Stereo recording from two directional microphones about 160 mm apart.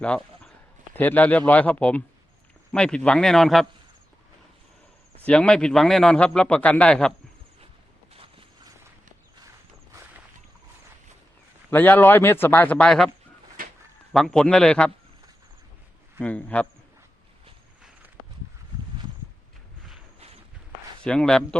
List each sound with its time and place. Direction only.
0.9 s a man's voice: 10° left (ahead or behind)
5.2 s a man's voice: 5° left (ahead or behind)
8.1 s a sound: 35° right (ahead or behind)
11.7 s speech: 10° left (ahead or behind)
14.1 s a man's voice: centre (ahead or behind)
16.2 s speech: 10° left (ahead or behind)
20.1 s walk: 40° right (ahead or behind)
21.0 s speech: 5° left (ahead or behind)